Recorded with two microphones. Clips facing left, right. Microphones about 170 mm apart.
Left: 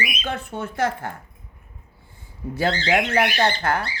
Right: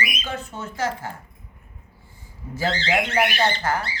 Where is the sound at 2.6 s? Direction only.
50° left (ahead or behind).